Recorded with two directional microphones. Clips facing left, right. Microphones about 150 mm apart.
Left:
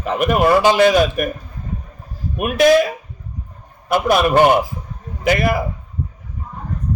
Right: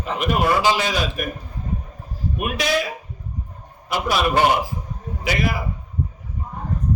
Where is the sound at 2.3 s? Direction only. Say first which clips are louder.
Left 11 dB; 50° left (ahead or behind).